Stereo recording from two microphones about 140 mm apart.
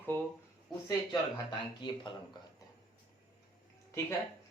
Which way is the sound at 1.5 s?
35° left (ahead or behind).